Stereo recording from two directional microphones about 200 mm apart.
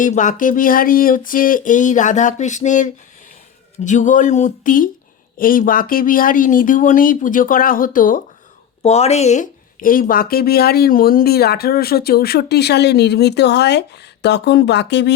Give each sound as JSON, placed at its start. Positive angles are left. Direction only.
{"t": 0.0, "sound": "a sound", "side_deg": 40}
{"t": 5.4, "sound": "speech", "side_deg": 45}
{"t": 8.8, "sound": "speech", "side_deg": 30}